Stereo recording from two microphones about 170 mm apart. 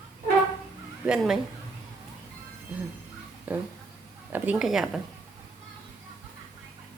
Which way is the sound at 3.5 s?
10° right (ahead or behind).